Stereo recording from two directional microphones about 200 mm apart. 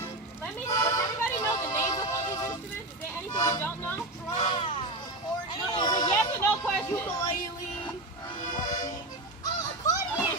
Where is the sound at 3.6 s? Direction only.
10° left (ahead or behind).